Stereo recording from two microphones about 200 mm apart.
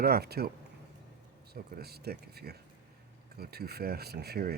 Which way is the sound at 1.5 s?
50° right (ahead or behind).